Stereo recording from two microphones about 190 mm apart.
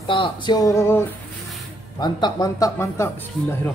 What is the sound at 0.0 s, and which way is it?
Speech, 25° left (ahead or behind).